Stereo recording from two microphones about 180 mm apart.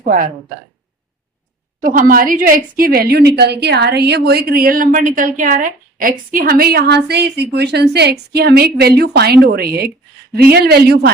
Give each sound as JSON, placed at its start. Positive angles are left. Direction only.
{"t": 0.0, "sound": "speech", "side_deg": -50}
{"t": 1.8, "sound": "a woman's voice", "side_deg": -50}